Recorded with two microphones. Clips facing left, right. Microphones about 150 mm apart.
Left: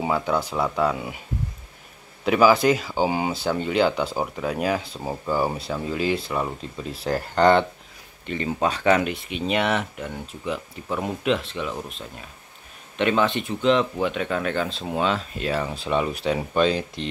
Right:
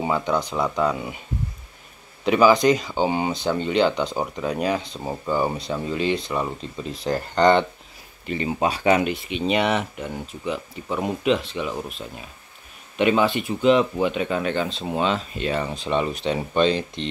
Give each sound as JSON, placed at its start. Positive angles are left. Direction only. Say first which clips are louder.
{"t": 0.0, "sound": "speech", "louder": "right 1 dB", "side_deg": 5}
{"t": 2.2, "sound": "speech", "louder": "right 1 dB", "side_deg": 5}
{"t": 8.3, "sound": "speech", "louder": "right 1 dB", "side_deg": -10}